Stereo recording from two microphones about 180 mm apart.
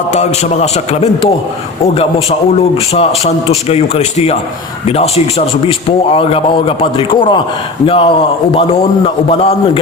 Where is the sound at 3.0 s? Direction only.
35° left (ahead or behind).